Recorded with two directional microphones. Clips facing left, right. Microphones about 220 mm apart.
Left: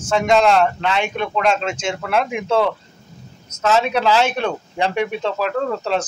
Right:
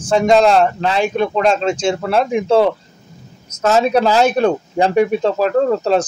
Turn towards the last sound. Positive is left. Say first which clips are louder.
# right 7 dB
turn(degrees=-40)  # may be behind; listen again after turning